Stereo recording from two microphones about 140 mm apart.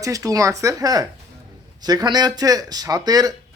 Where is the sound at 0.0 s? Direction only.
25° right (ahead or behind).